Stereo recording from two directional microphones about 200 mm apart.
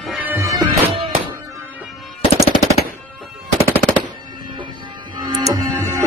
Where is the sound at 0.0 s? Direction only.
10° right (ahead or behind).